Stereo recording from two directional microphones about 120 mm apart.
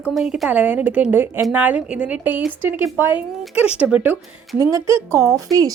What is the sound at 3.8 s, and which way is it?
Speech, 10° right (ahead or behind).